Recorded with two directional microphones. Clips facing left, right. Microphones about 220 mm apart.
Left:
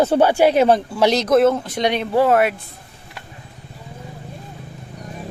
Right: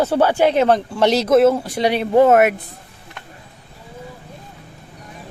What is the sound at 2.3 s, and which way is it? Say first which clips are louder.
Speech: right 3 dB; 50° right (ahead or behind).